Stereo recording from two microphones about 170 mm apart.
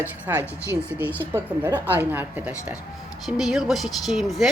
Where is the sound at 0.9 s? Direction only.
10° right (ahead or behind).